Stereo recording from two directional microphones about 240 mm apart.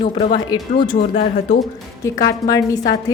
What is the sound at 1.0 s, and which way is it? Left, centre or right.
Speech, left.